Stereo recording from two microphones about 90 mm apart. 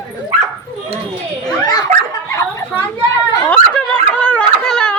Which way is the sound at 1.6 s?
45° left (ahead or behind).